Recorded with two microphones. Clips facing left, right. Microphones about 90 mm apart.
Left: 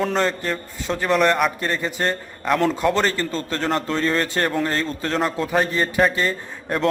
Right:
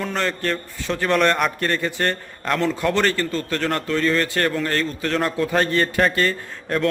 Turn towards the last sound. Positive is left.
turn(degrees=15)  # may be behind; listen again after turning